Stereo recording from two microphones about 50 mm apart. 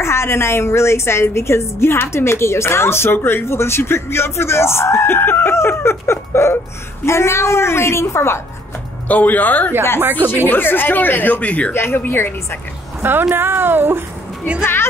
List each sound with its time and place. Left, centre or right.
0.0 s a woman's voice: left
9.0 s speech: left
11.7 s a woman's voice: left
12.0 s speech: left
13.3 s speech: right
14.6 s speech: left